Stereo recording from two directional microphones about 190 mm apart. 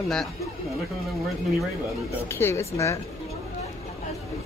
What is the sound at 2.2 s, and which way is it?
Speech, 15° left (ahead or behind).